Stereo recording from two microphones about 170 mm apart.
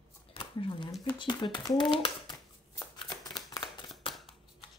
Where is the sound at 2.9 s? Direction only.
25° left (ahead or behind).